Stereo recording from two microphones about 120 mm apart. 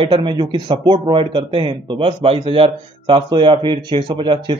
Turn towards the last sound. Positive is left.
turn(degrees=-45)  # may be behind; listen again after turning